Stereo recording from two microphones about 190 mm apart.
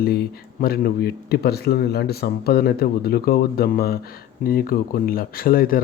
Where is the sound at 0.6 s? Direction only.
50° left (ahead or behind).